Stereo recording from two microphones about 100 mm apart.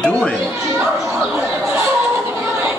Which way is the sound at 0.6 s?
5° right (ahead or behind).